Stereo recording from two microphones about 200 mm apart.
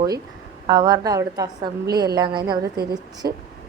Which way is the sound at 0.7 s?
20° right (ahead or behind).